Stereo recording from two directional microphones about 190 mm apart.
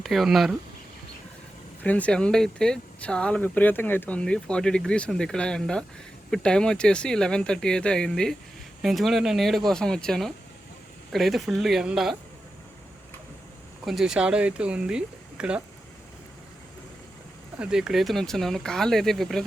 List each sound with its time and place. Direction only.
0.0 s speech: centre (ahead or behind)
1.8 s speech: 10° left (ahead or behind)
13.8 s speech: centre (ahead or behind)
17.6 s speech: 5° right (ahead or behind)